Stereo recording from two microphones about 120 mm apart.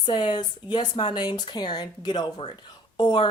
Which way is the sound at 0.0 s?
40° left (ahead or behind).